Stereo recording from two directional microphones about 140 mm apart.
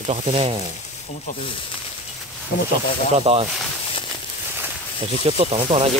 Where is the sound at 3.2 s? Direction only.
45° right (ahead or behind).